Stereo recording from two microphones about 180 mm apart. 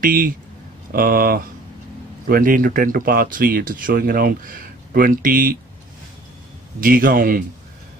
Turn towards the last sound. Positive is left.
turn(degrees=-50)  # may be behind; listen again after turning